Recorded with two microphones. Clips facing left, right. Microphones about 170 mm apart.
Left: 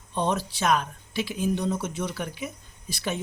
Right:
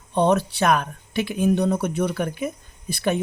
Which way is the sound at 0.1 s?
60° right (ahead or behind).